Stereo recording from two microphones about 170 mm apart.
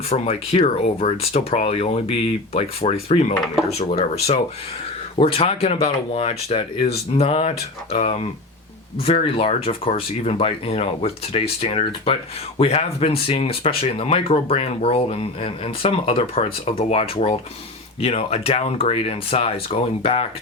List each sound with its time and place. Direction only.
0.1 s speech: 35° left (ahead or behind)